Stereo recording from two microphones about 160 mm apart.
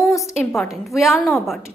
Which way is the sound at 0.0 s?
Centre (ahead or behind).